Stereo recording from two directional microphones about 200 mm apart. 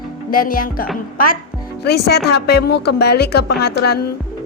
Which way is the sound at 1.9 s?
55° left (ahead or behind).